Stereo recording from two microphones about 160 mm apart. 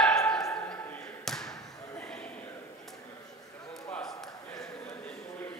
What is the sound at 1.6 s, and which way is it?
Slam, 20° left (ahead or behind).